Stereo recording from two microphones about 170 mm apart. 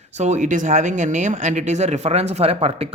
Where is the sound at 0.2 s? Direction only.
45° right (ahead or behind).